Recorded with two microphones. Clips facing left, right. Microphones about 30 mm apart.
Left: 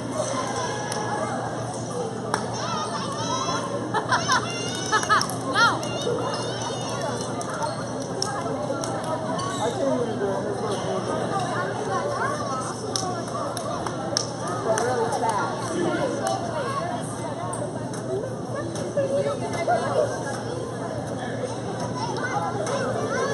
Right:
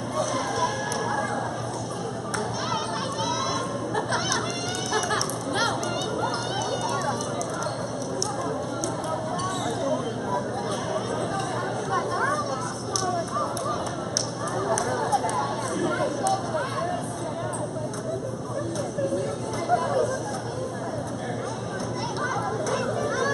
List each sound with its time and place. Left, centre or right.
3.9 s music: left
9.8 s chatter: centre
11.9 s chatter: centre
15.0 s a sound: centre
19.7 s a sound: centre
22.7 s music: centre